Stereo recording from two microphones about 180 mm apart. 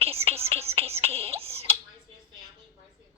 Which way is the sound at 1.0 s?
35° right (ahead or behind).